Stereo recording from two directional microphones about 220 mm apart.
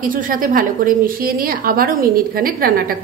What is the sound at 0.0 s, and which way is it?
A woman's voice, 40° right (ahead or behind).